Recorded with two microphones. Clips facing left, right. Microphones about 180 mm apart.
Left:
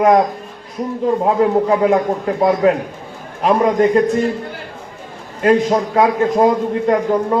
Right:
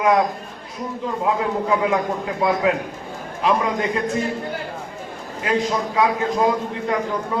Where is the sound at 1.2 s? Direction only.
40° left (ahead or behind).